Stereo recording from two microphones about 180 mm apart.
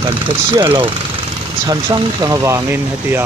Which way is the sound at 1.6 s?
20° right (ahead or behind).